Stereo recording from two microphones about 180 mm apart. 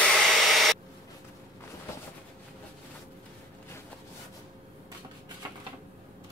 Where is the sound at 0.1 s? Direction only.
Centre (ahead or behind).